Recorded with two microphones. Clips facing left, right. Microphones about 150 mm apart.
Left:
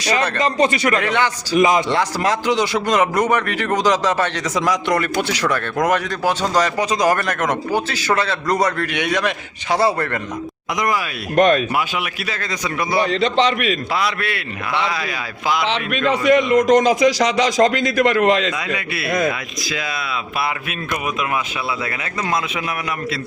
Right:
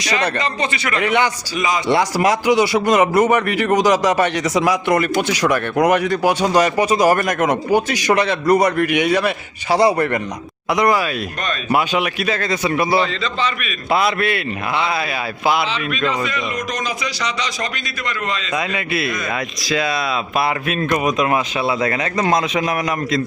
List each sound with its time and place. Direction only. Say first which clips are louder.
0.3 s a man's voice: left 5 dB; 45° left (ahead or behind)
0.9 s a man's voice: right 1 dB; 10° right (ahead or behind)
1.5 s a man's voice: left 7 dB; 50° left (ahead or behind)
1.9 s a man's voice: right 3 dB; 10° right (ahead or behind)
11.3 s speech: left 12 dB; 65° left (ahead or behind)
11.7 s a man's voice: right 4 dB; 35° right (ahead or behind)
13.1 s a man's voice: left 5 dB; 65° left (ahead or behind); by 13.7 s 85° left
15.9 s a man's voice: left 6 dB; 75° left (ahead or behind)
18.5 s a man's voice: right 3 dB; 25° right (ahead or behind)
19.7 s speech: right 6 dB; 35° right (ahead or behind)